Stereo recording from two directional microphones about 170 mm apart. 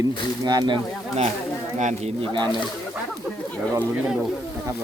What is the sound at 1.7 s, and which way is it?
Speech, 45° right (ahead or behind).